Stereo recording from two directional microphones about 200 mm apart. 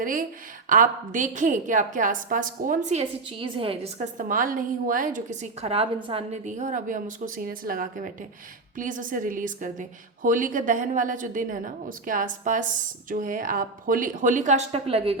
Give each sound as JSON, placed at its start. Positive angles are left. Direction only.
{"t": 0.0, "sound": "a woman's voice", "side_deg": -40}